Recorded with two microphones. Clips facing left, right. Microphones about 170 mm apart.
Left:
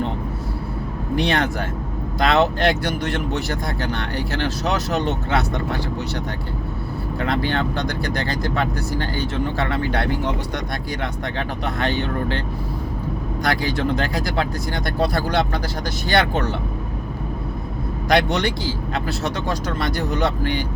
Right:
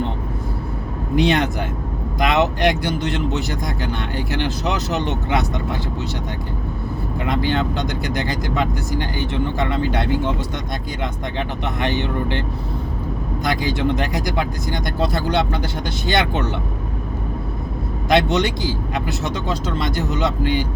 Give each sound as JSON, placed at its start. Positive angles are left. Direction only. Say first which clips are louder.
{"t": 1.1, "sound": "speech", "louder": "right 3 dB", "side_deg": -20}
{"t": 7.2, "sound": "speech", "louder": "right 1 dB", "side_deg": -15}
{"t": 13.4, "sound": "speech", "louder": "right 1 dB", "side_deg": -20}
{"t": 18.1, "sound": "speech", "louder": "right 2 dB", "side_deg": -20}